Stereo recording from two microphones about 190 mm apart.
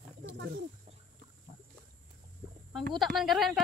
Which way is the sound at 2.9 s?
Centre (ahead or behind).